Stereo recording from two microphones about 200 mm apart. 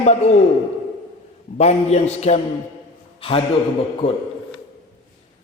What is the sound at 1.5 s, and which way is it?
A man's voice, 35° left (ahead or behind).